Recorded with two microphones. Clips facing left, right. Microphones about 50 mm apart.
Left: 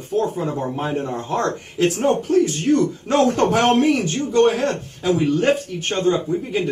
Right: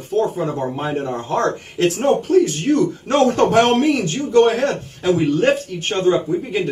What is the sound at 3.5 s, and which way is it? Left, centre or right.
Speech, right.